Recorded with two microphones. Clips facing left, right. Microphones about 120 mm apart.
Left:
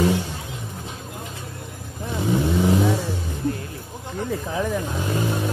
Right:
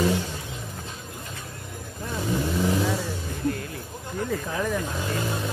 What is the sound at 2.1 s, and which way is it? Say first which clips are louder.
Vehicle: left 5 dB; 20° left (ahead or behind).